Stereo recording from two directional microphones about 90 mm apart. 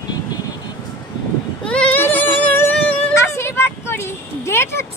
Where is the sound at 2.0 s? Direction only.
20° left (ahead or behind).